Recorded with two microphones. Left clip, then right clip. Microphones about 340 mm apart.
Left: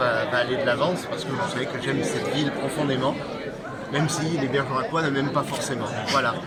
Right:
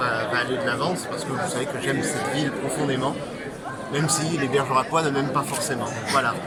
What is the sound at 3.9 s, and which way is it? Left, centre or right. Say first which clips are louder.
A man's voice: right 1 dB; centre.